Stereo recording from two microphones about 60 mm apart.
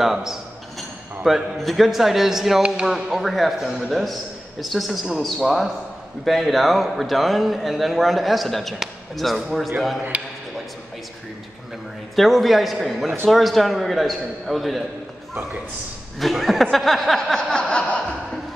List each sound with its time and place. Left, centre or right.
0.0 s a man's voice: centre
10.1 s a man's voice: right
12.2 s a man's voice: centre
16.2 s a man's voice: centre
17.4 s a sound: centre